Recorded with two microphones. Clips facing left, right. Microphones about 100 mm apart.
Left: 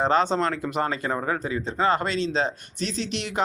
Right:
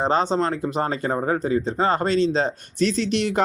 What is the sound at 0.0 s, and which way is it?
Speech, 30° right (ahead or behind).